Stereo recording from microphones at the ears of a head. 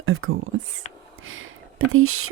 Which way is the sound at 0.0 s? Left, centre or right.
Right.